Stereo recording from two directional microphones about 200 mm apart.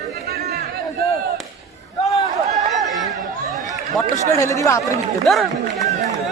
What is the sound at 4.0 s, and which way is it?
Speech, 5° left (ahead or behind).